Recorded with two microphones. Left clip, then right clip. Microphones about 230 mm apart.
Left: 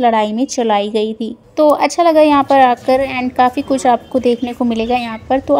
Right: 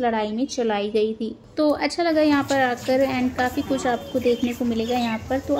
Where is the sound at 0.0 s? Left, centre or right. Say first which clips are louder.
Left 10 dB; left.